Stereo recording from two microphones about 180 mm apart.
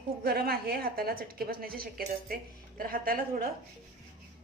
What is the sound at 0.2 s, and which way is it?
A woman's voice, 55° right (ahead or behind).